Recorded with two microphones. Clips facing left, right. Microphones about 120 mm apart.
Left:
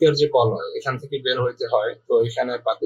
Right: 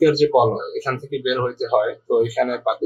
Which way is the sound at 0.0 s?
10° left (ahead or behind).